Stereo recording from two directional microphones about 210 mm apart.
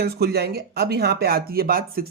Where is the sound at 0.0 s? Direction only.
50° right (ahead or behind).